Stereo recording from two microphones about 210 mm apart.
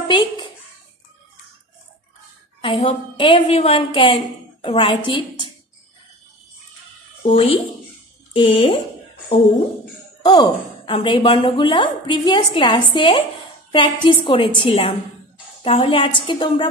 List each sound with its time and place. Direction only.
0.1 s a woman's voice: 20° left (ahead or behind)
2.6 s a woman's voice: 25° left (ahead or behind)
7.2 s a woman's voice: 25° left (ahead or behind)
10.2 s a woman's voice: 20° left (ahead or behind)